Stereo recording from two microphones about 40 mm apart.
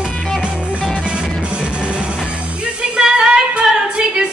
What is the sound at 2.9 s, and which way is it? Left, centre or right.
A capella, centre.